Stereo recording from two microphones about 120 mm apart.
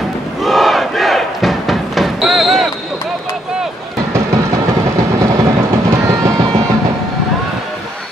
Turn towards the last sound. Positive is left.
turn(degrees=-25)  # may be behind; listen again after turning